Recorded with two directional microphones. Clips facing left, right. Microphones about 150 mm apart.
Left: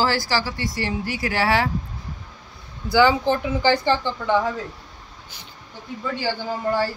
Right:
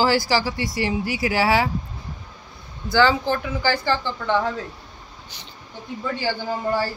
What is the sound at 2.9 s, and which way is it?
Speech, 15° left (ahead or behind).